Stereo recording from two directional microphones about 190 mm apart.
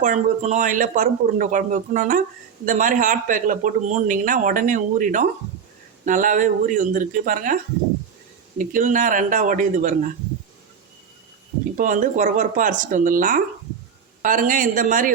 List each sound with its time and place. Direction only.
0.0 s speech: 40° right (ahead or behind)
11.8 s speech: 40° right (ahead or behind)